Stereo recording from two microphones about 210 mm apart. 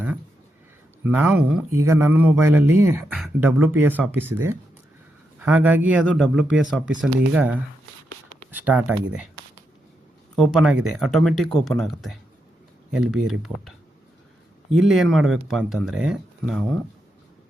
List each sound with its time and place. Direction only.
1.0 s speech: 5° right (ahead or behind)
10.3 s speech: centre (ahead or behind)
14.8 s speech: centre (ahead or behind)